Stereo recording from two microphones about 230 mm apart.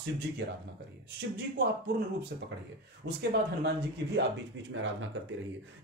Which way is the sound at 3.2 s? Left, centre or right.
Right.